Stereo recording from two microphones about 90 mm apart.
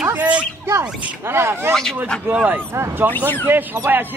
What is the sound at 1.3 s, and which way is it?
Speech, 30° right (ahead or behind).